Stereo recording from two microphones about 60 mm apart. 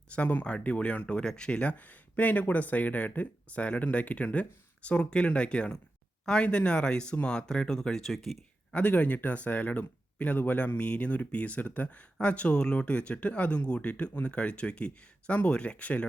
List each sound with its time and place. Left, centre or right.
0.1 s speech: left; by 8.4 s centre
8.7 s speech: left